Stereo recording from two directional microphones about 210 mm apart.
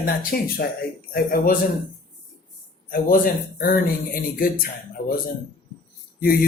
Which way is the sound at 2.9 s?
40° left (ahead or behind).